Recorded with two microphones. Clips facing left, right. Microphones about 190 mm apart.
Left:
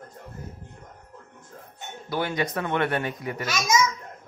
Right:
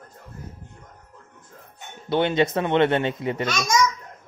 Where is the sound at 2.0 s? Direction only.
25° right (ahead or behind).